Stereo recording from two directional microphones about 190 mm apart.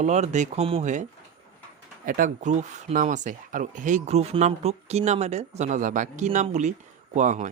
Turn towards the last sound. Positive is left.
turn(degrees=-40)  # may be behind; listen again after turning